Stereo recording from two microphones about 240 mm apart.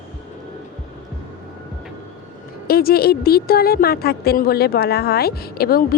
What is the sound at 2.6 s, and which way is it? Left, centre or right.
A woman's voice, left.